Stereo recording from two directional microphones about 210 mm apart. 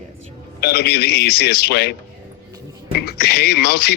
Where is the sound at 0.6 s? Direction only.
50° left (ahead or behind).